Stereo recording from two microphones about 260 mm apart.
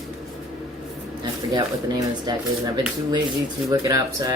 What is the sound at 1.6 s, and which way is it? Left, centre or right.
Speech, centre.